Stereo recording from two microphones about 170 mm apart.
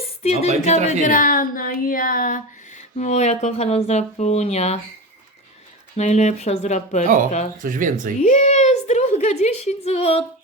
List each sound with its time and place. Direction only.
0.2 s a woman's voice: 40° left (ahead or behind)
3.0 s a woman's voice: 40° left (ahead or behind)
6.0 s a woman's voice: 40° left (ahead or behind)
7.6 s speech: 50° right (ahead or behind)
8.2 s a woman's voice: 45° left (ahead or behind)